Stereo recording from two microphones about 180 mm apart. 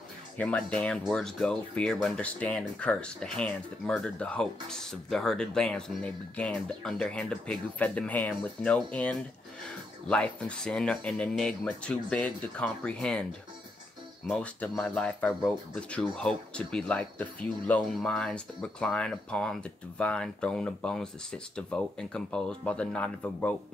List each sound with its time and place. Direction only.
0.4 s speech: 5° left (ahead or behind)
14.2 s speech: 5° left (ahead or behind)